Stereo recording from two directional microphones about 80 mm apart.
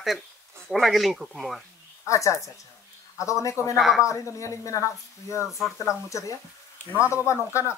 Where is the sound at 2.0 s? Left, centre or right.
Left.